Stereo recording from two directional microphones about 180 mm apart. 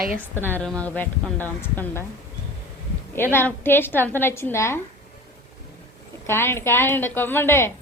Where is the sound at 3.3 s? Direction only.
10° left (ahead or behind).